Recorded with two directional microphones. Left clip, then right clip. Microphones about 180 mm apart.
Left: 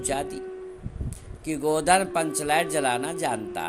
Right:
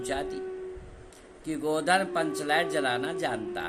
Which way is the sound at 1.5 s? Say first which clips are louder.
Left 4 dB; 30° left (ahead or behind).